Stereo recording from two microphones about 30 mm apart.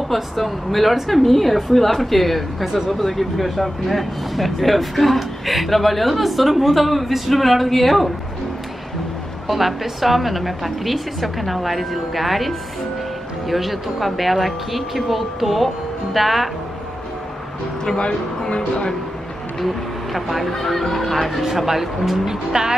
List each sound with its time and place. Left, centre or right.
0.1 s speech: centre
2.6 s speech: centre
2.9 s speech: centre
9.5 s speech: centre
18.5 s speech: left
20.2 s speech: centre
21.4 s speech: centre
22.2 s speech: right